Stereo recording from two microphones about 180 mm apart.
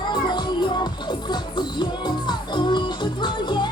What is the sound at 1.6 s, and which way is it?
Music, 25° left (ahead or behind).